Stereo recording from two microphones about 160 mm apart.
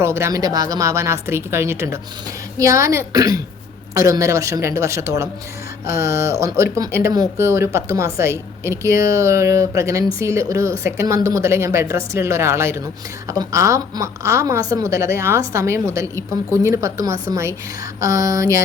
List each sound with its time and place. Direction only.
0.0 s a woman's voice: 15° right (ahead or behind)